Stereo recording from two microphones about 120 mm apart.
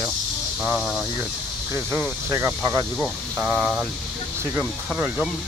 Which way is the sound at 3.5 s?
Centre (ahead or behind).